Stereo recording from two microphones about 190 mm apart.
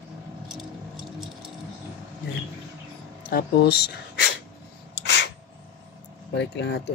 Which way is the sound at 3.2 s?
55° left (ahead or behind).